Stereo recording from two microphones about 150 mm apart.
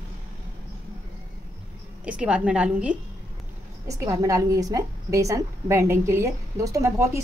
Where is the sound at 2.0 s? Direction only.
10° right (ahead or behind).